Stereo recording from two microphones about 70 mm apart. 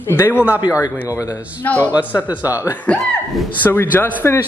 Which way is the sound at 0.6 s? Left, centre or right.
Left.